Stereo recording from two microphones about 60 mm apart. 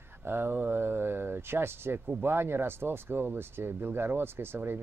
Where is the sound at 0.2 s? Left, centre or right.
Right.